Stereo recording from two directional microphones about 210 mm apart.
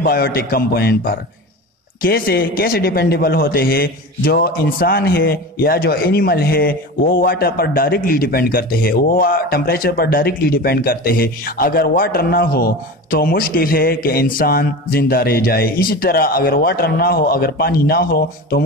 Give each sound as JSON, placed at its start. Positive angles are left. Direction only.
{"t": 0.0, "sound": "a man's voice", "side_deg": 45}